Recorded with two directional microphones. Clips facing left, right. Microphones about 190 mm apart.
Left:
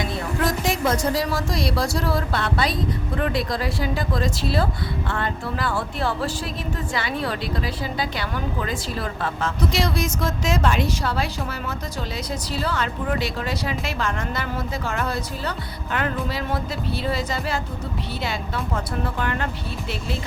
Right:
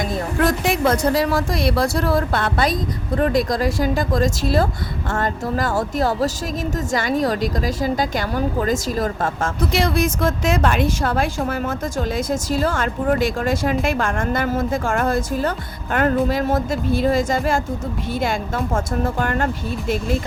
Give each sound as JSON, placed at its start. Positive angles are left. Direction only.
{"t": 0.0, "sound": "a woman's voice", "side_deg": -60}